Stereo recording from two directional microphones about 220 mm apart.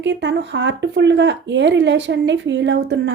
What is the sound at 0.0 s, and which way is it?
Speech, 55° right (ahead or behind).